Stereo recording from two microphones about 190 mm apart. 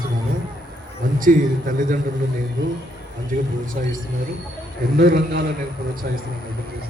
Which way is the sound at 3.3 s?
45° right (ahead or behind).